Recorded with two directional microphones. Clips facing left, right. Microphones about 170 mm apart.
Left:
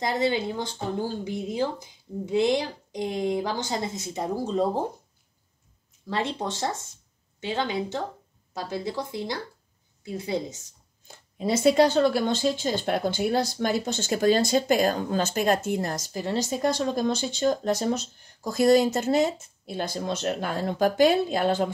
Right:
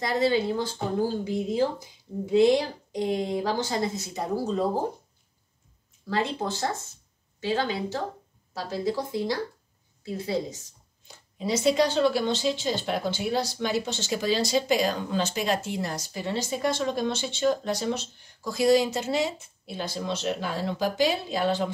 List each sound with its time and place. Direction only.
0.0 s speech: 20° left (ahead or behind)
6.0 s speech: 25° left (ahead or behind)
11.1 s speech: 50° left (ahead or behind)